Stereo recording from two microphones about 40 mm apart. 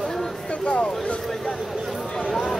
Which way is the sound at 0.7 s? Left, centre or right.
Left.